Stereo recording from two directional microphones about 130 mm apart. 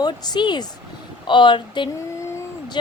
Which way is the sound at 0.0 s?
35° left (ahead or behind).